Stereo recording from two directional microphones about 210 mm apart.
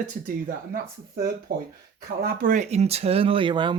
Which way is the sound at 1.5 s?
45° right (ahead or behind).